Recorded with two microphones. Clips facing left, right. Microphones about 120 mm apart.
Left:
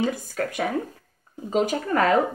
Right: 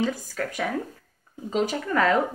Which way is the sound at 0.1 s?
55° left (ahead or behind).